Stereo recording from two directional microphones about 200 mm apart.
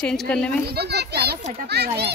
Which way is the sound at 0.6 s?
55° right (ahead or behind).